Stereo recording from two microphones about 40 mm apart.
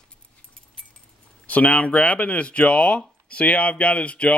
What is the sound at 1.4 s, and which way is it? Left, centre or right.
Speech, left.